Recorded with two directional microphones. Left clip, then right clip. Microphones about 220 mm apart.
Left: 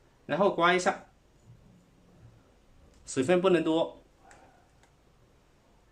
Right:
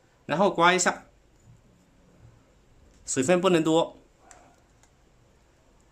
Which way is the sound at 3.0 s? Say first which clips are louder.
Right 3 dB; 25° right (ahead or behind).